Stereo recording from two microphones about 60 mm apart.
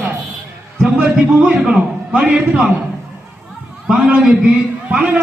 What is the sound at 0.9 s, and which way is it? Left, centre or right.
Speech, right.